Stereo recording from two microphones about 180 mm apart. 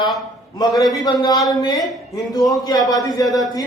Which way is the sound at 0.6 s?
20° left (ahead or behind).